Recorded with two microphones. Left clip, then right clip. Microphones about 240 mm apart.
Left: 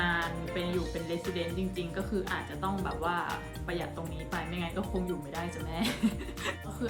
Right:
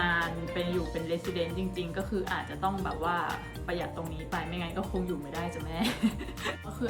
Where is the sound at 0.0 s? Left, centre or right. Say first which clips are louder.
Right 2 dB; centre.